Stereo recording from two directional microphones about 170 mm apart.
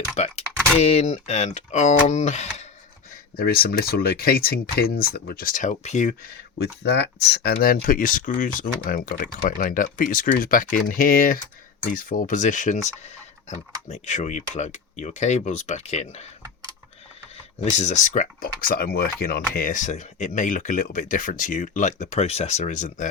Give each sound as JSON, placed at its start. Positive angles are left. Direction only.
{"t": 0.2, "sound": "speech", "side_deg": 40}
{"t": 3.3, "sound": "speech", "side_deg": 65}
{"t": 6.6, "sound": "speech", "side_deg": 85}
{"t": 13.8, "sound": "speech", "side_deg": 40}
{"t": 17.6, "sound": "speech", "side_deg": 40}
{"t": 19.5, "sound": "speech", "side_deg": 50}